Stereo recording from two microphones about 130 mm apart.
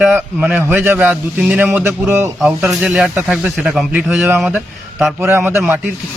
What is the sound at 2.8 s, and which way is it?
Speech, 10° right (ahead or behind).